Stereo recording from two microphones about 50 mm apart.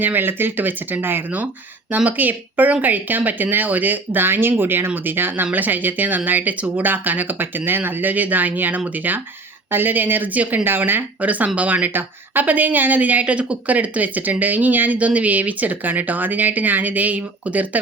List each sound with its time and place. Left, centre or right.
0.0 s speech: right